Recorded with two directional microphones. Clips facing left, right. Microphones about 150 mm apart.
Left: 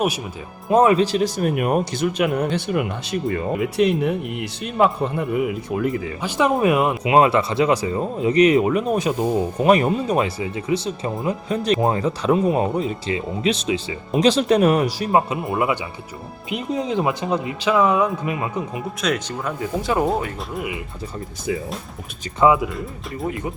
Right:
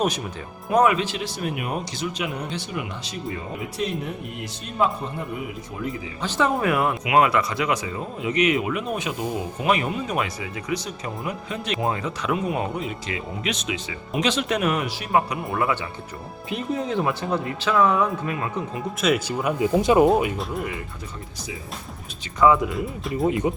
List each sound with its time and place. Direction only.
0.7 s speech: 30° left (ahead or behind); by 5.9 s 70° left (ahead or behind)
6.2 s speech: 15° left (ahead or behind); by 15.1 s 35° left (ahead or behind)
15.1 s speech: 25° left (ahead or behind)
19.0 s speech: 5° right (ahead or behind)
20.5 s speech: 5° left (ahead or behind)
22.5 s speech: centre (ahead or behind)
23.1 s speech: 20° right (ahead or behind)